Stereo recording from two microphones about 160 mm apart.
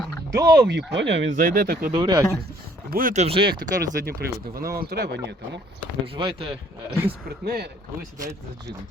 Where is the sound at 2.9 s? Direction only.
55° right (ahead or behind).